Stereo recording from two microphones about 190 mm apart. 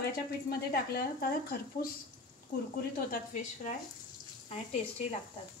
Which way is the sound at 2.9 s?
45° left (ahead or behind).